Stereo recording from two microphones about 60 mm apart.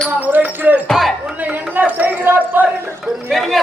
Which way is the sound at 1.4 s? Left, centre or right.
Right.